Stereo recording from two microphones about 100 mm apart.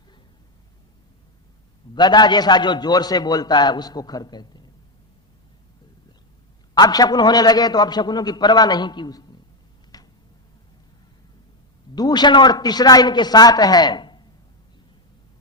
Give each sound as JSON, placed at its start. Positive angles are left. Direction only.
{"t": 2.0, "sound": "a man's voice", "side_deg": 45}
{"t": 6.7, "sound": "a man's voice", "side_deg": 40}
{"t": 9.9, "sound": "a sound", "side_deg": 40}
{"t": 11.9, "sound": "a man's voice", "side_deg": 45}